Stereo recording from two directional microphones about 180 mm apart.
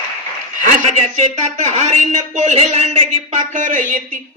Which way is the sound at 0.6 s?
40° right (ahead or behind).